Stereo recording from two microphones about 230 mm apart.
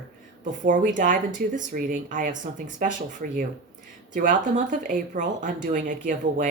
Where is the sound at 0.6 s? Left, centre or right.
Right.